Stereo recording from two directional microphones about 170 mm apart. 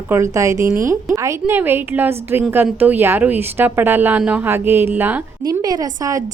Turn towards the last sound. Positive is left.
turn(degrees=-20)  # may be behind; listen again after turning